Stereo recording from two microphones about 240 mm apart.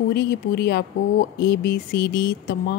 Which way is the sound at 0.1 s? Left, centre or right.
Left.